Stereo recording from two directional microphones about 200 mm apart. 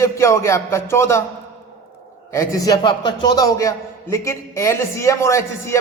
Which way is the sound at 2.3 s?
15° left (ahead or behind).